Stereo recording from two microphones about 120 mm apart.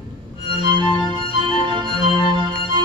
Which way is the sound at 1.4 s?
40° right (ahead or behind).